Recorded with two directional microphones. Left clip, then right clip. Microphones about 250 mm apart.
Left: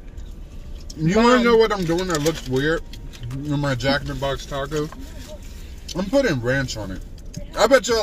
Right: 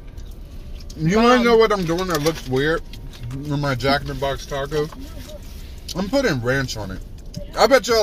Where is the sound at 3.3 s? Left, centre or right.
Centre.